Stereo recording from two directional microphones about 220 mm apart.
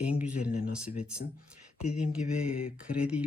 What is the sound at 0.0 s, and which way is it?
Speech, 5° right (ahead or behind).